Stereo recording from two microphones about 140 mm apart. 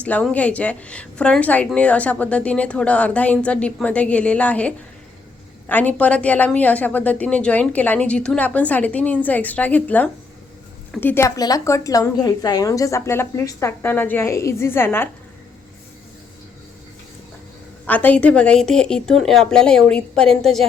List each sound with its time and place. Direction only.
0.0 s a woman's voice: 10° left (ahead or behind)
11.3 s a woman's voice: 25° left (ahead or behind)
17.8 s speech: 10° left (ahead or behind)